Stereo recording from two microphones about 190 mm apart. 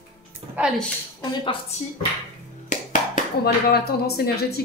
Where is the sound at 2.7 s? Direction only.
40° left (ahead or behind).